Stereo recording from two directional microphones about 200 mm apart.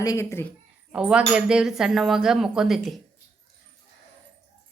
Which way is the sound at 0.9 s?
5° right (ahead or behind).